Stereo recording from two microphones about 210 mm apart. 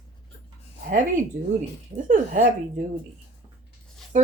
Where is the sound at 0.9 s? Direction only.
35° right (ahead or behind).